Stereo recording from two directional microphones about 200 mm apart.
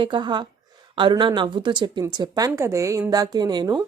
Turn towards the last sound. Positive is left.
turn(degrees=-20)  # may be behind; listen again after turning